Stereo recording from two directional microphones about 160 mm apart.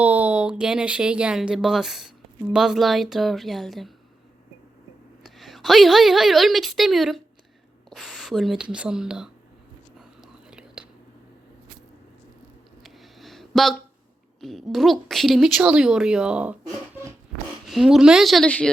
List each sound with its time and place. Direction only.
0.0 s a woman's voice: 10° right (ahead or behind)
5.2 s a woman's voice: centre (ahead or behind)
10.0 s whispering: 5° right (ahead or behind)
12.8 s a sound: centre (ahead or behind)
14.4 s a woman's voice: centre (ahead or behind)
16.9 s a sound: 15° right (ahead or behind)
17.7 s a woman's voice: centre (ahead or behind)